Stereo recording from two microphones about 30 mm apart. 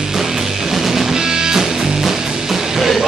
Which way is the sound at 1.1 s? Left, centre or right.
Centre.